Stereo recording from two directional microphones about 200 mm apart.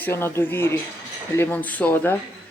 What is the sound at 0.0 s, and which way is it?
Speech, 10° left (ahead or behind).